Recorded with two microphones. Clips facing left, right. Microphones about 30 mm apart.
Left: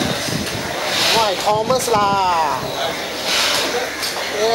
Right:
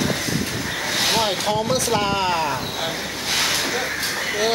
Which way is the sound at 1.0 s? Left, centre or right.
Left.